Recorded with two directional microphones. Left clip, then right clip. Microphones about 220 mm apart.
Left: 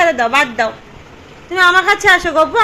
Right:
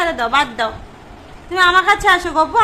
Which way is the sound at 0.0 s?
20° left (ahead or behind).